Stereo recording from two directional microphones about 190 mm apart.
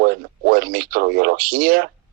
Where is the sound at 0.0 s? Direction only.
50° right (ahead or behind).